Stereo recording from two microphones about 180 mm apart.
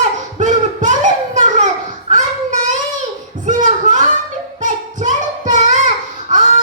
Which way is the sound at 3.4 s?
45° right (ahead or behind).